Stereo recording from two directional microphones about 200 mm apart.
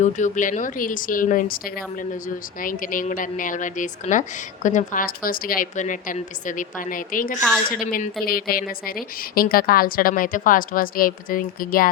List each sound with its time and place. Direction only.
0.0 s a woman's voice: 40° left (ahead or behind)
2.6 s a woman's voice: 45° left (ahead or behind)